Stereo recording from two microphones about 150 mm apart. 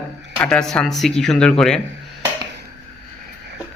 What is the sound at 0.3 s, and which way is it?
Speech, 5° left (ahead or behind).